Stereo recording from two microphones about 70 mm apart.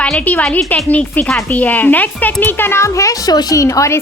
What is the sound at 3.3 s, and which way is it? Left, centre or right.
Speech, left.